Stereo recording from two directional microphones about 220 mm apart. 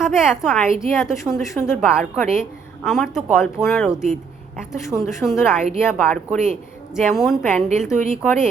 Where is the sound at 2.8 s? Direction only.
Centre (ahead or behind).